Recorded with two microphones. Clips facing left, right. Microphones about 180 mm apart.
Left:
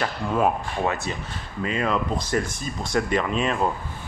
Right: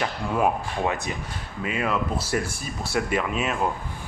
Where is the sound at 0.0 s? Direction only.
15° right (ahead or behind).